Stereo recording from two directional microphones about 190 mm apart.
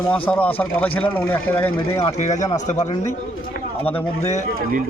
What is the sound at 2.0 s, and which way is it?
Speech, 40° left (ahead or behind).